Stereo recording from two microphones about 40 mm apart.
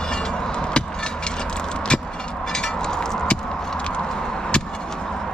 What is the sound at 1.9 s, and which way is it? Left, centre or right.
Vehicle, left.